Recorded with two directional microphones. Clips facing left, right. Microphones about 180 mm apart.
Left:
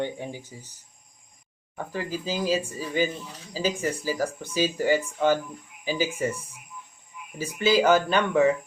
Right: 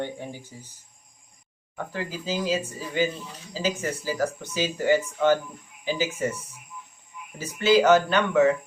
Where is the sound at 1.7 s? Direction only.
10° left (ahead or behind).